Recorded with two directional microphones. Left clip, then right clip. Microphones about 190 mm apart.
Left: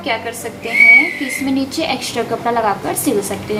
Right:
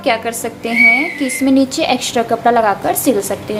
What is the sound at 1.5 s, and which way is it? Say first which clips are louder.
A woman's voice: right 6 dB; 30° right (ahead or behind).